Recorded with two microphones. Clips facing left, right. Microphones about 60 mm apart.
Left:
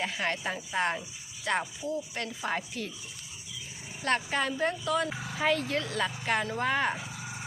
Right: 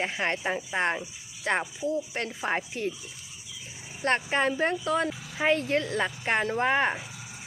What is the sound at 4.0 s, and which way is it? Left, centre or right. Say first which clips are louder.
Speech: right 3 dB; right.